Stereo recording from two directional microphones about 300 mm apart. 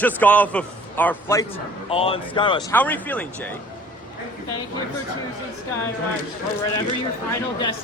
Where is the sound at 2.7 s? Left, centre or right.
Centre.